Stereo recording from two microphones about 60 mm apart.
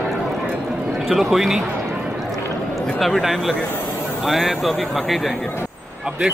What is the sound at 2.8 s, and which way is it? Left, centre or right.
Speech, centre.